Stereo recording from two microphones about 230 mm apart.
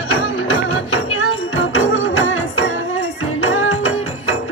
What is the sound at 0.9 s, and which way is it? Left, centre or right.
Music, left.